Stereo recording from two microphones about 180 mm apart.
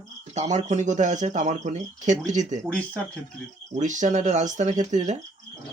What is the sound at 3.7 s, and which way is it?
Speech, 45° right (ahead or behind).